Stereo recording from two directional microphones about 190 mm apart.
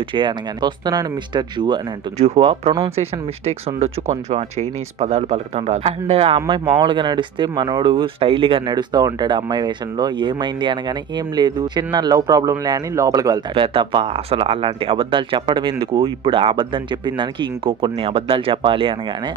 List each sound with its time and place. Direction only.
0.1 s speech: 25° right (ahead or behind)
2.1 s speech: 35° right (ahead or behind)